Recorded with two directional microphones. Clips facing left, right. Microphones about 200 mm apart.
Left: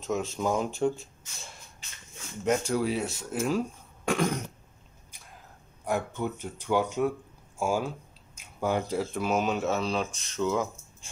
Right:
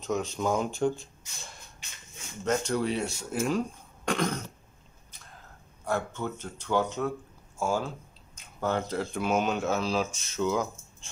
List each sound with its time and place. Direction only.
0.0 s speech: centre (ahead or behind)
5.1 s a sound: 10° left (ahead or behind)
5.9 s speech: 15° left (ahead or behind)